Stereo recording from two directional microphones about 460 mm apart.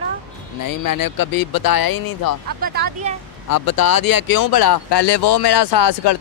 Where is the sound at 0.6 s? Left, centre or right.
Left.